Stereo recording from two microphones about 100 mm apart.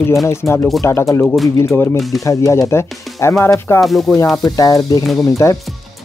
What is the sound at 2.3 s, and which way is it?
Speech, 30° left (ahead or behind).